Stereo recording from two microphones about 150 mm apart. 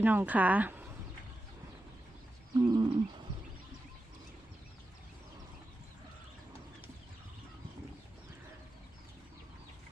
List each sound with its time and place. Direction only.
0.0 s speech: 10° right (ahead or behind)
2.6 s wild animals: 30° right (ahead or behind)